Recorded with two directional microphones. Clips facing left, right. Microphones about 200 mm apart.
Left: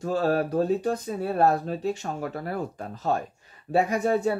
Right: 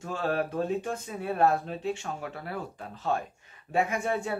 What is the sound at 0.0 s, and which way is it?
Speech, 40° left (ahead or behind).